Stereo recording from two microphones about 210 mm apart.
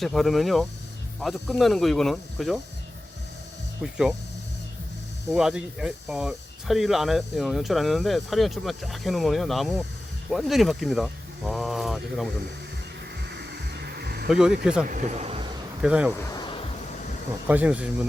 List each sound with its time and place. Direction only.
0.0 s speech: centre (ahead or behind)
3.8 s speech: 5° right (ahead or behind)
5.3 s speech: 5° right (ahead or behind)
13.3 s a sound: 50° right (ahead or behind)
14.3 s speech: 5° right (ahead or behind)
14.8 s a man's voice: 40° right (ahead or behind)
15.8 s speech: 5° right (ahead or behind)
16.3 s insect: 20° left (ahead or behind)
17.5 s speech: 5° right (ahead or behind)